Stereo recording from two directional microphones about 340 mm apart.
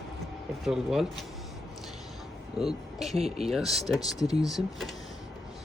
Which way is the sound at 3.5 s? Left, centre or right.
Centre.